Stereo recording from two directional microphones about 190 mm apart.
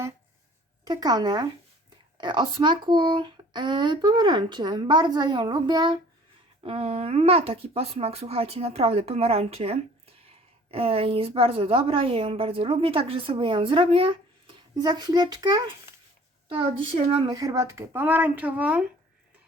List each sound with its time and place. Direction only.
0.9 s a woman's voice: 20° right (ahead or behind)